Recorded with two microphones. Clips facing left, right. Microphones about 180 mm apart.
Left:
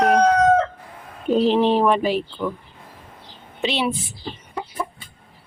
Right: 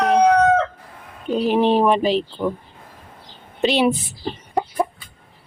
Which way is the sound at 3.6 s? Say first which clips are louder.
Right 5 dB; 45° right (ahead or behind).